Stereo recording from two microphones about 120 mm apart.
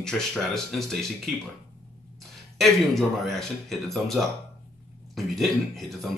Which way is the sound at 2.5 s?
Centre (ahead or behind).